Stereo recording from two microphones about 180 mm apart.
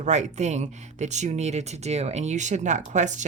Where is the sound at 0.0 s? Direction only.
40° right (ahead or behind).